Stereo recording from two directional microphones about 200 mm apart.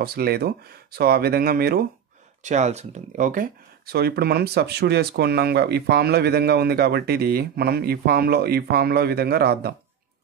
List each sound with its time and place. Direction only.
0.0 s speech: 50° right (ahead or behind)
2.4 s speech: 35° right (ahead or behind); by 9.8 s 50° right (ahead or behind)